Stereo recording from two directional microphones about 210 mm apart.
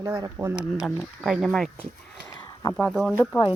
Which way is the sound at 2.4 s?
15° left (ahead or behind).